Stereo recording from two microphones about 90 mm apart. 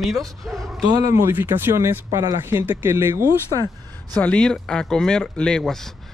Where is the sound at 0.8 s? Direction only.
45° right (ahead or behind).